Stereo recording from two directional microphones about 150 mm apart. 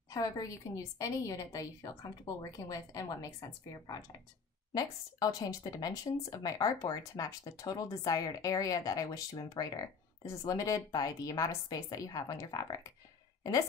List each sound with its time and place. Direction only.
0.1 s a woman's voice: 25° left (ahead or behind)